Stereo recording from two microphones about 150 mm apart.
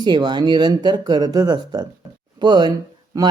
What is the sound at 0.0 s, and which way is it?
Speech, 30° right (ahead or behind).